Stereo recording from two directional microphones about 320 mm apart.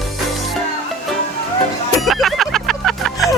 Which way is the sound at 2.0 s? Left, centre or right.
Centre.